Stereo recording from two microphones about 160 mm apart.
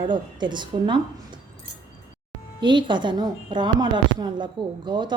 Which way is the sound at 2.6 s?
30° right (ahead or behind).